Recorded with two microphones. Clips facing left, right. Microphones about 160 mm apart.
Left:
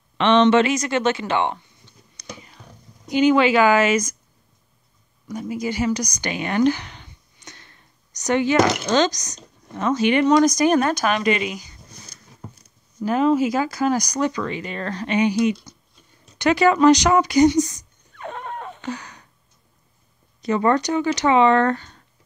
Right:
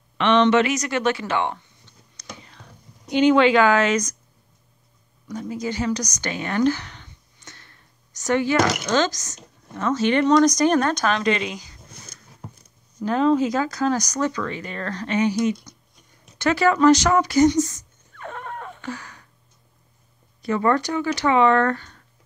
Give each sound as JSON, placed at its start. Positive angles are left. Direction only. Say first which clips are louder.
{"t": 0.2, "sound": "speech", "louder": "left 2 dB", "side_deg": 25}
{"t": 2.1, "sound": "computer keyboard", "louder": "left 2 dB", "side_deg": 10}
{"t": 3.1, "sound": "speech", "louder": "even", "side_deg": 5}
{"t": 5.3, "sound": "speech", "louder": "left 2 dB", "side_deg": 10}
{"t": 13.0, "sound": "speech", "louder": "left 1 dB", "side_deg": 10}
{"t": 16.3, "sound": "a sound", "louder": "left 2 dB", "side_deg": 15}
{"t": 20.4, "sound": "speech", "louder": "left 2 dB", "side_deg": 20}